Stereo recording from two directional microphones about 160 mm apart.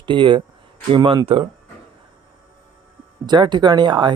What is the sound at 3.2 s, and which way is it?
Speech, 30° right (ahead or behind).